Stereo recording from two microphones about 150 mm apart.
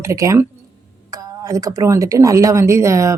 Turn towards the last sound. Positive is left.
turn(degrees=-20)  # may be behind; listen again after turning